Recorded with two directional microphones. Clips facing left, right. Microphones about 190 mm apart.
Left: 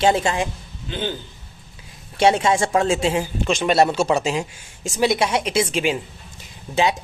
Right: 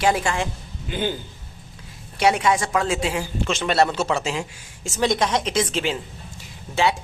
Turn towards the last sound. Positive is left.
turn(degrees=20)  # may be behind; listen again after turning